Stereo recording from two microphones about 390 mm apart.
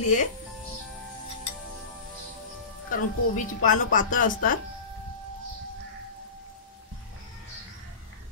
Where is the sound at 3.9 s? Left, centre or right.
Left.